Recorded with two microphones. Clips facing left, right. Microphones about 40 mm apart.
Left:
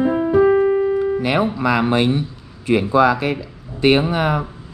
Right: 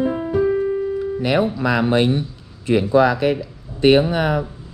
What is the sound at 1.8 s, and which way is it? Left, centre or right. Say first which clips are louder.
Speech: right 2 dB; left.